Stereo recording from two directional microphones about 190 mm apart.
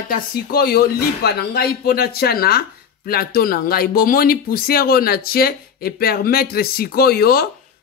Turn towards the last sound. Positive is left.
turn(degrees=50)  # may be behind; listen again after turning